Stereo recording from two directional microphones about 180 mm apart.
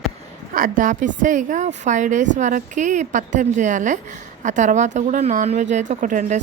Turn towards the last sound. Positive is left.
turn(degrees=-45)  # may be behind; listen again after turning